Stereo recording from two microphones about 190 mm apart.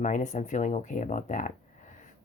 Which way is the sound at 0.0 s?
40° left (ahead or behind).